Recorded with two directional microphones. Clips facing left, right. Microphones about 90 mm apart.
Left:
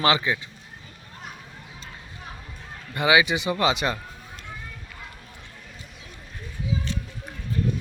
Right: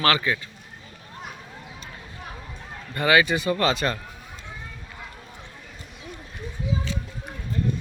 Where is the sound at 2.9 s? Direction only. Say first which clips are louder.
Even; 15° left (ahead or behind).